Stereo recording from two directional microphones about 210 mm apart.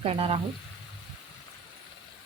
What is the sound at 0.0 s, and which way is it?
Speech, 25° right (ahead or behind).